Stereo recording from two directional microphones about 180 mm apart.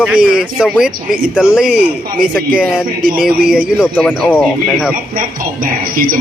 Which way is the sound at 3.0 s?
50° right (ahead or behind).